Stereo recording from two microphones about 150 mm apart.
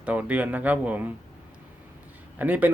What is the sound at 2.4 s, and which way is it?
Speech, 10° right (ahead or behind).